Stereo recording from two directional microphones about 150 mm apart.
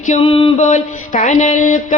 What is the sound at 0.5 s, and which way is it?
Speech, 55° left (ahead or behind).